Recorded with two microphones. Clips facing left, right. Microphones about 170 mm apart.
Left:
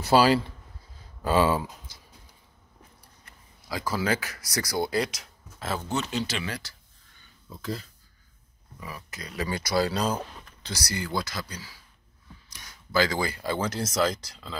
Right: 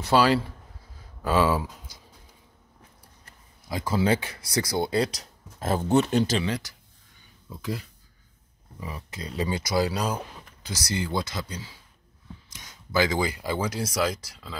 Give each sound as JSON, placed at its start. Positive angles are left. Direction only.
{"t": 0.0, "sound": "speech", "side_deg": 5}
{"t": 1.9, "sound": "a sound", "side_deg": -15}
{"t": 3.6, "sound": "speech", "side_deg": -25}
{"t": 6.4, "sound": "speech", "side_deg": -20}
{"t": 8.7, "sound": "speech", "side_deg": -25}